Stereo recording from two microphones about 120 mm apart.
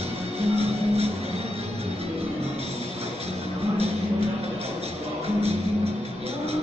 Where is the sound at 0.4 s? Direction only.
55° right (ahead or behind).